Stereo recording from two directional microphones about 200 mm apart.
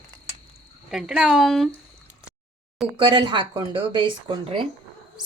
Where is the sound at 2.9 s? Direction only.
25° right (ahead or behind).